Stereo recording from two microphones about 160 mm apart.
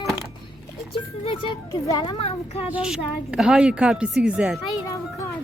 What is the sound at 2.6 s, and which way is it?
A woman's voice, 5° right (ahead or behind).